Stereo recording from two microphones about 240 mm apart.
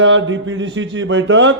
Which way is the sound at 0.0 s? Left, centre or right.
Right.